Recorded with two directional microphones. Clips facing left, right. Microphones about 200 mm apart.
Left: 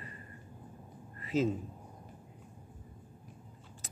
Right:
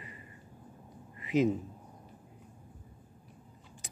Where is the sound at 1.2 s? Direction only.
15° right (ahead or behind).